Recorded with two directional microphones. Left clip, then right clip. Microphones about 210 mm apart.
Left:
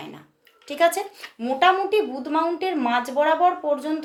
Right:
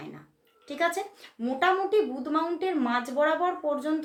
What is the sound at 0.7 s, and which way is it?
Speech, 45° left (ahead or behind).